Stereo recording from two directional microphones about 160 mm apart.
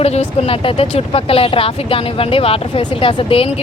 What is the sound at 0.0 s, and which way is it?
Speech, 40° left (ahead or behind).